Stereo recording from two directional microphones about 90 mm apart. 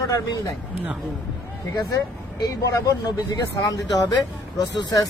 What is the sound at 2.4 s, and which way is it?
Speech, 40° left (ahead or behind).